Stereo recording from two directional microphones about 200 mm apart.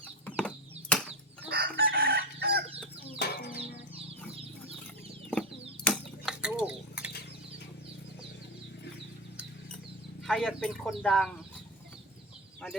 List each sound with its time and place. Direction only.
0.3 s a sound: 5° left (ahead or behind)
1.5 s chicken: 50° right (ahead or behind)
3.2 s music: 55° left (ahead or behind)
5.3 s chicken: 5° left (ahead or behind)
5.9 s a sound: 5° right (ahead or behind)
10.2 s speech: 5° left (ahead or behind)